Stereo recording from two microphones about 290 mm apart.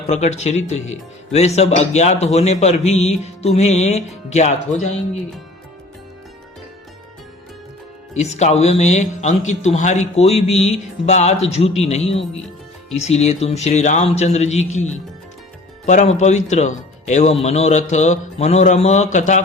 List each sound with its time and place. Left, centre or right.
0.1 s speech: left
8.1 s speech: left
15.9 s speech: left